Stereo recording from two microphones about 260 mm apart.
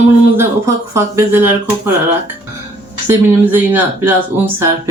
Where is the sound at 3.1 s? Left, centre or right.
Centre.